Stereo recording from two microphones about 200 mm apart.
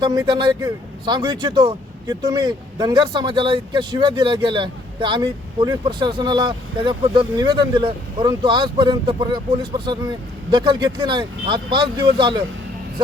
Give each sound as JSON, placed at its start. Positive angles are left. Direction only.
{"t": 0.0, "sound": "speech", "side_deg": -20}